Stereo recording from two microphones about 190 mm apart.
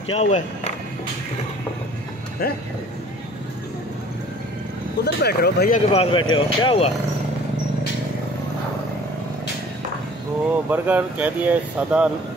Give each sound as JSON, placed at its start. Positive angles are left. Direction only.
{"t": 0.1, "sound": "speech", "side_deg": 35}
{"t": 5.0, "sound": "speech", "side_deg": 60}
{"t": 5.7, "sound": "speech", "side_deg": 30}
{"t": 10.7, "sound": "speech", "side_deg": -10}